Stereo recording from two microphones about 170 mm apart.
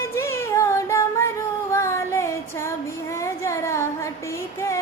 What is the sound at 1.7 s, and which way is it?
Female singing, 15° left (ahead or behind).